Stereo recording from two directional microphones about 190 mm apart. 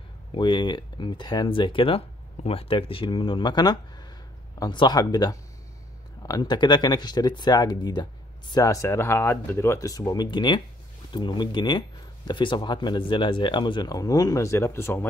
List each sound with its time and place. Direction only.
0.3 s speech: 25° left (ahead or behind)